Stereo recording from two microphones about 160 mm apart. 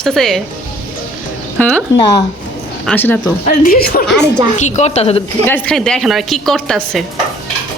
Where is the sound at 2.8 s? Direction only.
10° left (ahead or behind).